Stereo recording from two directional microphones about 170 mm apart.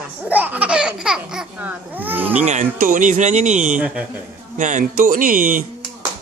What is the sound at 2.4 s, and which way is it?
Speech, 45° right (ahead or behind).